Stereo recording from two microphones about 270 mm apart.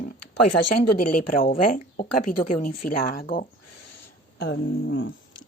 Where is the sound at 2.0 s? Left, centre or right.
Left.